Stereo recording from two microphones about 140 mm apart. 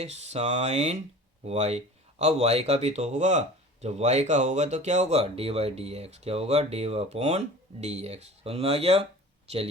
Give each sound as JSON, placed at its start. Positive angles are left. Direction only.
{"t": 0.0, "sound": "speech", "side_deg": -50}